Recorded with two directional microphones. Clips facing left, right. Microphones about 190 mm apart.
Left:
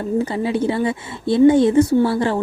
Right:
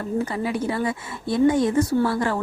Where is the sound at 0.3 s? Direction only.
25° left (ahead or behind).